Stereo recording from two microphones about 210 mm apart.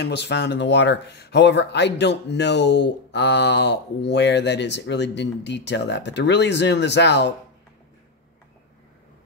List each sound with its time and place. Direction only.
0.0 s speech: 55° left (ahead or behind)